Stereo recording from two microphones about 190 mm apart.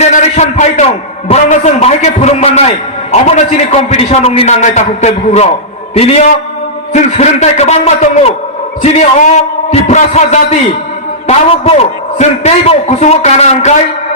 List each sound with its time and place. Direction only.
0.0 s a man's voice: 35° left (ahead or behind)